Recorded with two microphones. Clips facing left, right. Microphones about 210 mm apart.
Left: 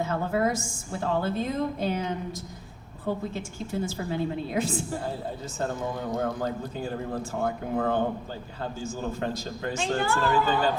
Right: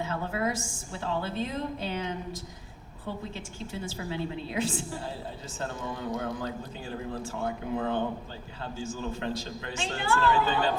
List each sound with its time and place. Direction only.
0.0 s a woman's voice: 45° left (ahead or behind)
6.1 s a woman's voice: 45° left (ahead or behind)